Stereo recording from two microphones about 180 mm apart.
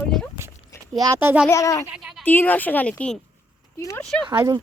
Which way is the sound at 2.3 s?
10° left (ahead or behind).